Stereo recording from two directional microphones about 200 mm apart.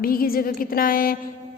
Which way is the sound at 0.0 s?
45° left (ahead or behind).